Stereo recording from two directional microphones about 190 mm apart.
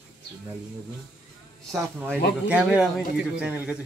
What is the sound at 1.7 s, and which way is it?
Speech, centre (ahead or behind).